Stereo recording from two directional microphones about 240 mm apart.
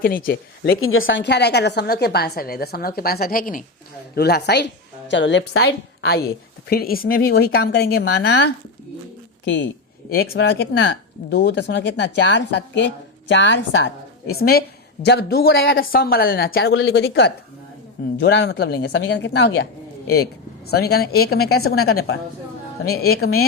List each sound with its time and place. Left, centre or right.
0.0 s a woman's voice: left
0.8 s a woman's voice: left
20.7 s a woman's voice: left
23.0 s a woman's voice: left